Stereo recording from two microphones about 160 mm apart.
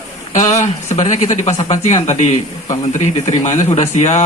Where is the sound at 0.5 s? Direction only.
45° left (ahead or behind).